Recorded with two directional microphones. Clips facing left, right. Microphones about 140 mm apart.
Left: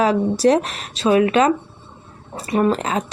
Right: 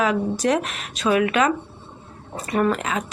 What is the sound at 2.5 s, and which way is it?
Speech, 30° left (ahead or behind).